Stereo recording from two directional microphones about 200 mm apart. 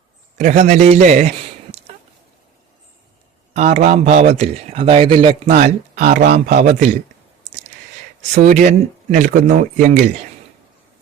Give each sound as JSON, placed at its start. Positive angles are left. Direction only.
{"t": 0.3, "sound": "speech", "side_deg": -35}
{"t": 3.5, "sound": "speech", "side_deg": -35}
{"t": 8.4, "sound": "speech", "side_deg": -40}